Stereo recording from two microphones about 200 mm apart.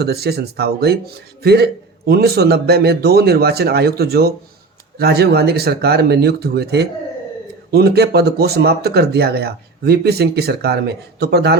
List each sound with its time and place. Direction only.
0.0 s speech: 55° right (ahead or behind)